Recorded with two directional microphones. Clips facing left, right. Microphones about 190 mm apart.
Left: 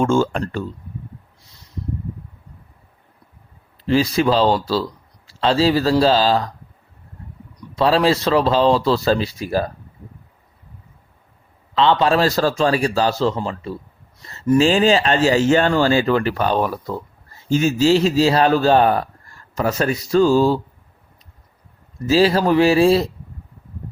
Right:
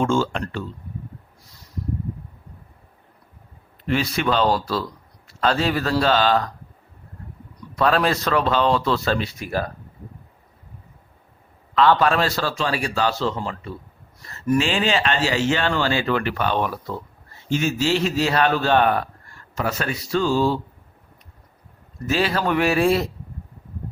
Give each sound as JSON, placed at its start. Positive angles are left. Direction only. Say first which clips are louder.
{"t": 0.0, "sound": "speech", "louder": "left 4 dB", "side_deg": 45}
{"t": 3.8, "sound": "a man's voice", "louder": "left 5 dB", "side_deg": 35}
{"t": 7.8, "sound": "a man's voice", "louder": "left 4 dB", "side_deg": 30}
{"t": 11.7, "sound": "a man's voice", "louder": "left 1 dB", "side_deg": 25}
{"t": 14.2, "sound": "a sound", "louder": "left 4 dB", "side_deg": 25}
{"t": 14.6, "sound": "a man's voice", "louder": "left 7 dB", "side_deg": 40}
{"t": 22.0, "sound": "a man's voice", "louder": "left 7 dB", "side_deg": 35}